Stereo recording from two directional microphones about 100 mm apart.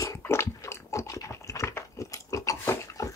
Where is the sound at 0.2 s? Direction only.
25° left (ahead or behind).